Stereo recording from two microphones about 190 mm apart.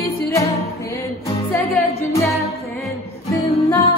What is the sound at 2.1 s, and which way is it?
Music, 15° left (ahead or behind).